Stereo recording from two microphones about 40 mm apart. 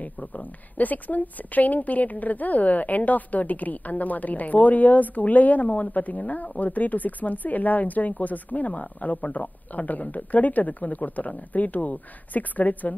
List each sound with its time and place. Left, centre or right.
0.0 s speech: left